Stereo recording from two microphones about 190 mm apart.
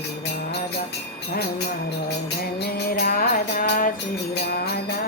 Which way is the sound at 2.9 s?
50° left (ahead or behind).